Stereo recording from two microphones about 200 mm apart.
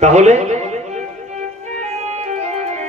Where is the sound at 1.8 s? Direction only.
35° right (ahead or behind).